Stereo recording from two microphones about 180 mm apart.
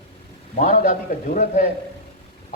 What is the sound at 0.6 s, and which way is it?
Speech, 45° left (ahead or behind).